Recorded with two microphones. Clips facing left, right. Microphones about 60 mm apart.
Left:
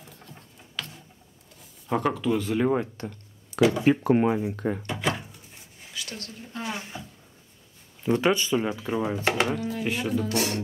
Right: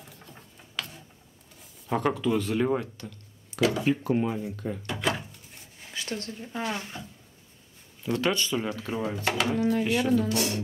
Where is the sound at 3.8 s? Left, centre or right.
Left.